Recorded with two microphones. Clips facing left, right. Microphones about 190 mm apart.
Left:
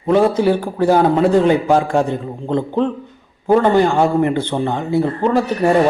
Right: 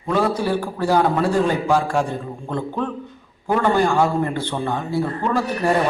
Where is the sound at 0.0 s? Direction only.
20° left (ahead or behind).